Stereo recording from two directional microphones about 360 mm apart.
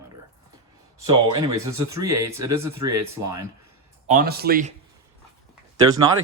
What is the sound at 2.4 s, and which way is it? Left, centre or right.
Speech, right.